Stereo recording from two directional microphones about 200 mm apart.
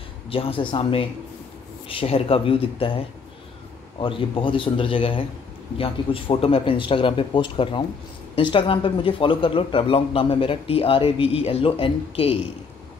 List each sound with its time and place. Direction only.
0.3 s a man's voice: 25° left (ahead or behind)
4.0 s a man's voice: 25° left (ahead or behind)